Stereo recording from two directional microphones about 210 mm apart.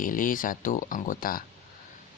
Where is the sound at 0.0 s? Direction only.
40° left (ahead or behind).